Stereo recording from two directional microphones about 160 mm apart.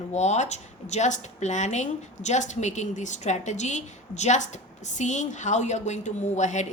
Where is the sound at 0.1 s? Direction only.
45° left (ahead or behind).